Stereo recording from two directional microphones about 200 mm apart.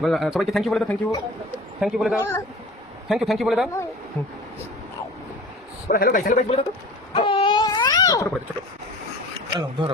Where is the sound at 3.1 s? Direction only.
Centre (ahead or behind).